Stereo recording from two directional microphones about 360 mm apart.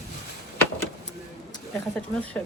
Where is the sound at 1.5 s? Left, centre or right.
Centre.